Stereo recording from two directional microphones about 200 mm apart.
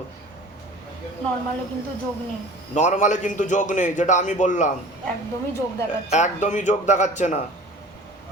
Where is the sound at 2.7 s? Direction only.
35° left (ahead or behind).